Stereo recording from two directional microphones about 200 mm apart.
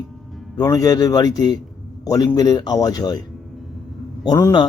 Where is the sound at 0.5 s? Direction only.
15° left (ahead or behind).